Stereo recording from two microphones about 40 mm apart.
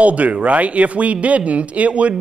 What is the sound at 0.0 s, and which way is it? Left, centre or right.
A man's voice, right.